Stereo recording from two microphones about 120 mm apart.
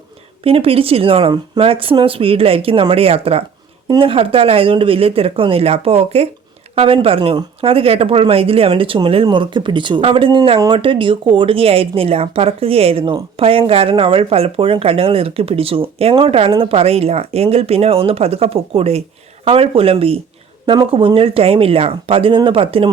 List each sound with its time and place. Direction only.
0.4 s speech: 50° right (ahead or behind)